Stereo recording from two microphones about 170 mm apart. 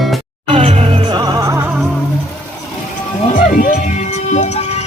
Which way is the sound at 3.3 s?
55° left (ahead or behind).